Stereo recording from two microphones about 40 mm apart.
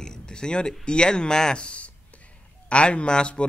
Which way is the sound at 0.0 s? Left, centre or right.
Centre.